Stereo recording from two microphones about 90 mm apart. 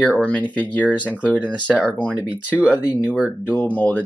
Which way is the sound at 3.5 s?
15° left (ahead or behind).